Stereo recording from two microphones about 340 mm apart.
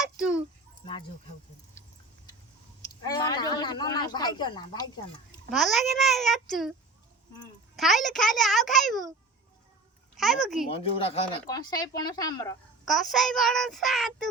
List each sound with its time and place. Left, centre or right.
0.0 s a sound: centre
0.8 s speech: centre
3.0 s speech: centre
5.5 s child singing: centre
7.8 s a child's voice: centre
8.1 s child singing: centre
10.2 s child singing: centre
10.7 s speech: centre
12.8 s child singing: centre